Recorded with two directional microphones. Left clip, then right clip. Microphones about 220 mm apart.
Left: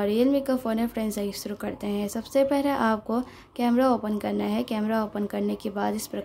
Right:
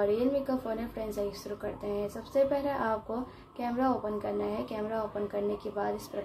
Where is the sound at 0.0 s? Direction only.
35° left (ahead or behind).